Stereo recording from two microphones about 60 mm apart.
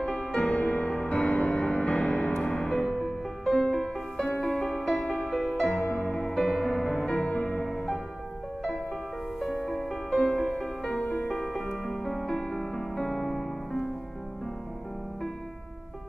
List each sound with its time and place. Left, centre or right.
0.0 s music: centre
2.3 s music: centre
6.3 s music: centre
7.2 s music: left
9.7 s music: centre